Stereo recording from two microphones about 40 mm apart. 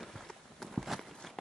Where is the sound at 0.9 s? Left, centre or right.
Centre.